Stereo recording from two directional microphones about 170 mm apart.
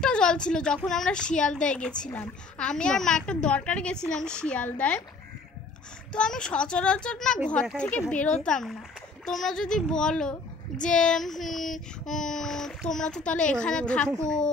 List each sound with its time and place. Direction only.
0.0 s a woman's voice: 5° left (ahead or behind)
6.1 s a woman's voice: 5° left (ahead or behind)